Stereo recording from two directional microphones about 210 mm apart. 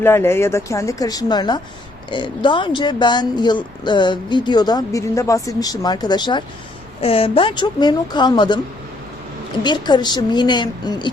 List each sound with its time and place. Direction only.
0.0 s speech: 10° left (ahead or behind)
9.6 s speech: 20° left (ahead or behind)